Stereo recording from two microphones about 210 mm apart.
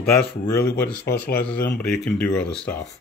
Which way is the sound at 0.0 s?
5° left (ahead or behind).